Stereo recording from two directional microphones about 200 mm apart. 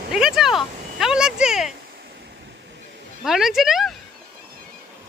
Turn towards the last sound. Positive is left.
turn(degrees=0)  # may be behind; listen again after turning